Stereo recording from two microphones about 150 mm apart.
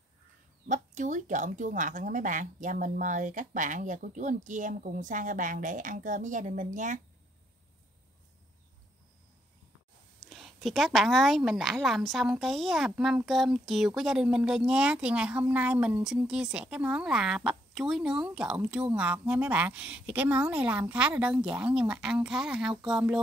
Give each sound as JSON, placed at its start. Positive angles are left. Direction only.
{"t": 0.7, "sound": "speech", "side_deg": -55}
{"t": 10.3, "sound": "a woman's voice", "side_deg": 0}